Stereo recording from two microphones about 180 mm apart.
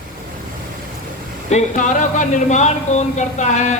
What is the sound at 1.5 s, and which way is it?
Speech, 40° left (ahead or behind).